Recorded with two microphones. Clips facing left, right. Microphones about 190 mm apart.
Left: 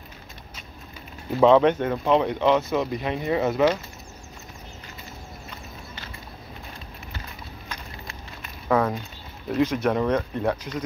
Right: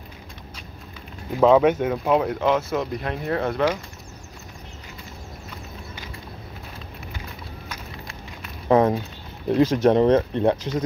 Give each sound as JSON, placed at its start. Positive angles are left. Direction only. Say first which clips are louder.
{"t": 1.4, "sound": "speech", "louder": "right 1 dB", "side_deg": -5}
{"t": 7.6, "sound": "a sound", "louder": "even", "side_deg": -5}
{"t": 8.6, "sound": "speech", "louder": "right 5 dB", "side_deg": -25}